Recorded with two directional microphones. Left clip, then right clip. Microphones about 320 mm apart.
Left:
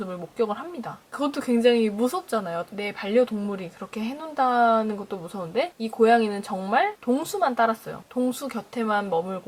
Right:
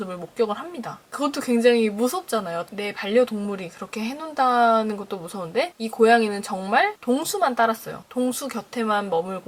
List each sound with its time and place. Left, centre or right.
0.0 s speech: centre
5.1 s a woman's voice: centre
5.5 s a woman's voice: centre